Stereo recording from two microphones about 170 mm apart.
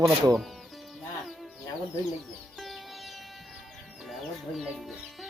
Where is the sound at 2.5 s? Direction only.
Centre (ahead or behind).